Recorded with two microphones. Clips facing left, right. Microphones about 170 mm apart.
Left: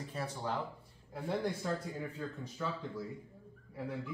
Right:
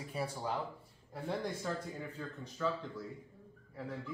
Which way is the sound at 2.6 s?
5° left (ahead or behind).